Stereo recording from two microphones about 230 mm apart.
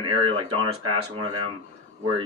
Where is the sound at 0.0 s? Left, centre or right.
Right.